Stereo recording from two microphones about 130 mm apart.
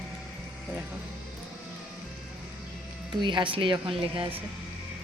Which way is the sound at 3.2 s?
35° right (ahead or behind).